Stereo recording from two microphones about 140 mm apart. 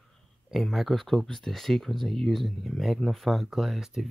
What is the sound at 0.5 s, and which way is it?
Speech, centre (ahead or behind).